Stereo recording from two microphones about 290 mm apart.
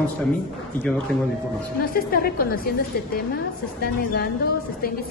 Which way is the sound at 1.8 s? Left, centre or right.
Left.